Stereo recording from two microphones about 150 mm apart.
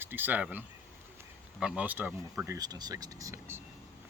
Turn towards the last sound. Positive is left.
turn(degrees=-15)  # may be behind; listen again after turning